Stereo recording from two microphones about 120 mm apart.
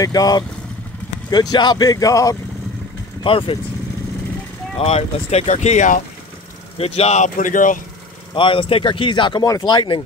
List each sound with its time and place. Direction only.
0.0 s speech: 30° left (ahead or behind)
3.3 s speech: 50° left (ahead or behind)
4.7 s speech: 60° left (ahead or behind); by 6.0 s 85° left
6.8 s a man's voice: 60° left (ahead or behind); by 7.8 s 90° left
8.4 s speech: 45° left (ahead or behind)